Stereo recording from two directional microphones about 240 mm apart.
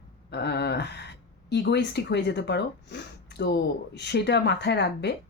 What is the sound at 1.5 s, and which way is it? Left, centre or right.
Speech, left.